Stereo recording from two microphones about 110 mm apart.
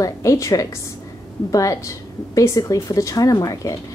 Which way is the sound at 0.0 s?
30° left (ahead or behind).